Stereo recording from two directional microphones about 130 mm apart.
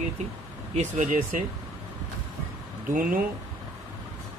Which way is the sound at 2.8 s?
90° right.